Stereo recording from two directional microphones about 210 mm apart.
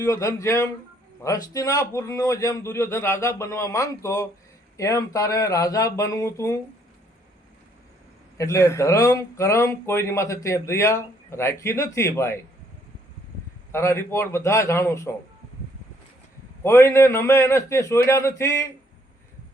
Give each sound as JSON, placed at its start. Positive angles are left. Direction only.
{"t": 0.0, "sound": "speech", "side_deg": 15}
{"t": 8.4, "sound": "speech", "side_deg": 15}
{"t": 13.7, "sound": "speech", "side_deg": 10}
{"t": 16.6, "sound": "speech", "side_deg": 10}